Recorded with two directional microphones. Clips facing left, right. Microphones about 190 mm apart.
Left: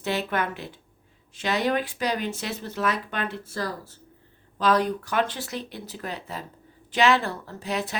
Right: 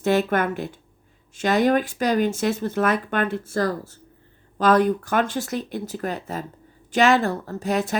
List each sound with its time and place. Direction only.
0.0 s speech: 50° right (ahead or behind)